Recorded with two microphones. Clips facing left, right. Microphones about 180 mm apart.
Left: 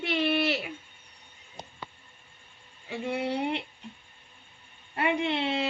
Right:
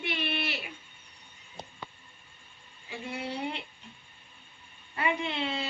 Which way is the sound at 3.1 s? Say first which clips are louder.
Left 5 dB; 70° left (ahead or behind).